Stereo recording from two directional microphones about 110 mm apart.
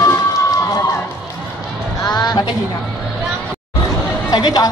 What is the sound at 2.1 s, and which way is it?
Music, 40° left (ahead or behind).